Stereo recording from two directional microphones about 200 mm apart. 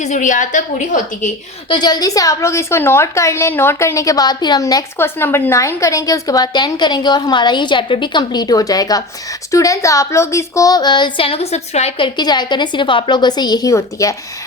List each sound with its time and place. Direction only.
0.0 s a woman's voice: 40° left (ahead or behind)
1.7 s a woman's voice: 20° left (ahead or behind)